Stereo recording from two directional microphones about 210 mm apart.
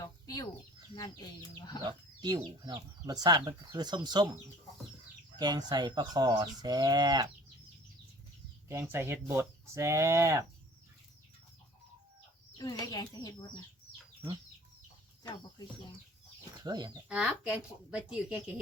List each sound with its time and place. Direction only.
1.5 s speech: 20° left (ahead or behind)
1.8 s speech: 20° right (ahead or behind)
5.4 s speech: 20° right (ahead or behind)
8.7 s speech: 10° right (ahead or behind)
12.8 s speech: 20° left (ahead or behind)
15.2 s speech: 20° left (ahead or behind)
16.6 s speech: 20° right (ahead or behind)
17.1 s speech: 5° right (ahead or behind)